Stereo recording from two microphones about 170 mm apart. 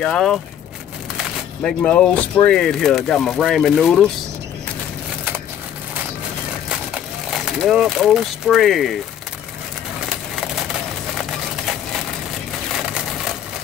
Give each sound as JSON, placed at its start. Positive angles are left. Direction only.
{"t": 0.0, "sound": "speech", "side_deg": 5}
{"t": 1.1, "sound": "a sound", "side_deg": 5}
{"t": 2.4, "sound": "speech", "side_deg": 5}
{"t": 7.3, "sound": "speech", "side_deg": -5}